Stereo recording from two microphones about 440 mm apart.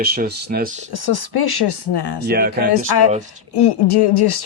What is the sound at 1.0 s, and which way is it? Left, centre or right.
Speech, left.